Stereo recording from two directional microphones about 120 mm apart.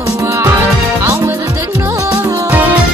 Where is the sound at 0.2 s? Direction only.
25° right (ahead or behind).